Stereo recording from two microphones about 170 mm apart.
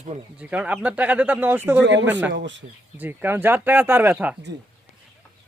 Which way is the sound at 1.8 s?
90° right.